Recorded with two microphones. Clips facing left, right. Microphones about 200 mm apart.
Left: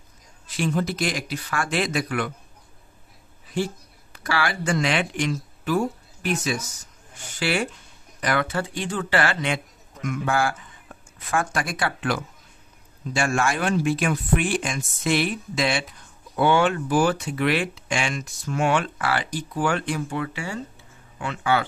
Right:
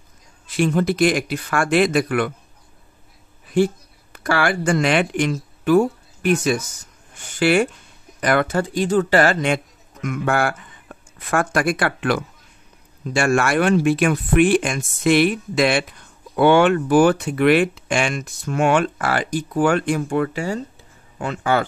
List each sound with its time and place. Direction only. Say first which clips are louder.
0.6 s speech: right 7 dB; 60° right (ahead or behind)
3.5 s speech: right 9 dB; 55° right (ahead or behind)
10.0 s speech: right 3 dB; 60° right (ahead or behind); by 21.6 s 45° right (ahead or behind)